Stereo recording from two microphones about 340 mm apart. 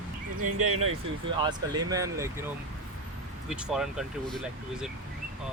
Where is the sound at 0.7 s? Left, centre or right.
Right.